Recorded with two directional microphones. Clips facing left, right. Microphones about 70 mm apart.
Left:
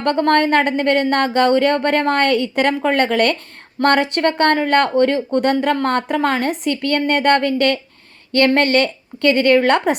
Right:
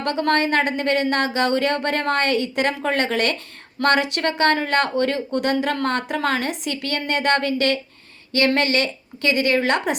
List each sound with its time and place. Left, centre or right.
0.0 s speech: left